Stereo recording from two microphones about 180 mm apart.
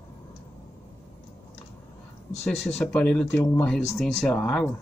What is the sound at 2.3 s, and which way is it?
Speech, 35° left (ahead or behind).